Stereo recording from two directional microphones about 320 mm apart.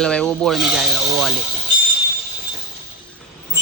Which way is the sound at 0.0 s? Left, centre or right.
Centre.